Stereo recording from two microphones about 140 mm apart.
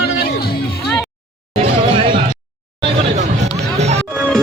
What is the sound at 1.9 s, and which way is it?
Music, 40° right (ahead or behind).